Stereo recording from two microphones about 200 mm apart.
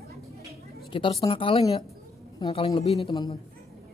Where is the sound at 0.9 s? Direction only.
25° left (ahead or behind).